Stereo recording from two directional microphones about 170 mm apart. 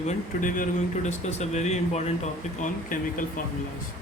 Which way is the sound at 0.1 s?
50° left (ahead or behind).